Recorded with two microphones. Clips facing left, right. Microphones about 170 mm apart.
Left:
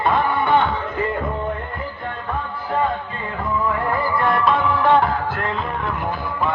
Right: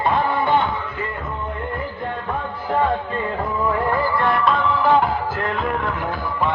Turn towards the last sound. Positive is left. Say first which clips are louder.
# left 1 dB
turn(degrees=0)  # may be behind; listen again after turning